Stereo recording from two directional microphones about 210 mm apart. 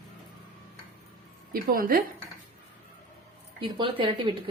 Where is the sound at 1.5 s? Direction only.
45° right (ahead or behind).